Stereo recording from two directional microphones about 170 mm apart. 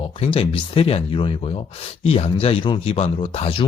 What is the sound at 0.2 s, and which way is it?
Speech, 35° left (ahead or behind).